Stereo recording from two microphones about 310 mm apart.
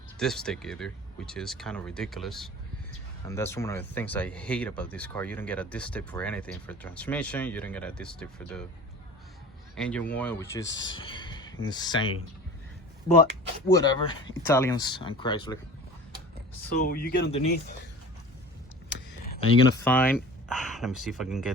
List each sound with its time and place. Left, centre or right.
0.2 s speech: centre
9.7 s speech: centre
10.6 s speech: left
10.9 s a sound: centre
11.6 s speech: centre
13.7 s speech: centre
16.7 s speech: left
19.8 s speech: centre